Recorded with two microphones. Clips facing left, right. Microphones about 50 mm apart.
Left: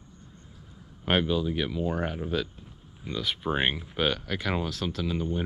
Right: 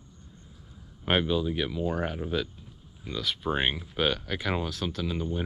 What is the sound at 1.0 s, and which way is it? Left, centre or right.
Speech, centre.